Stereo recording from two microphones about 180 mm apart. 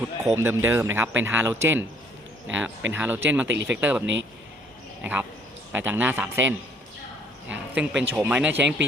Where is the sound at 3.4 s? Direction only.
80° right.